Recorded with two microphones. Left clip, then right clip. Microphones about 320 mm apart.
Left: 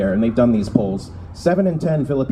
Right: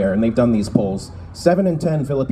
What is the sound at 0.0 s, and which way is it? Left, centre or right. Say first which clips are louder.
Speech: even; right.